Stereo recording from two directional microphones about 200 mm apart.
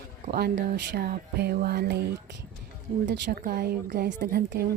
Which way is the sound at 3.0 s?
55° right (ahead or behind).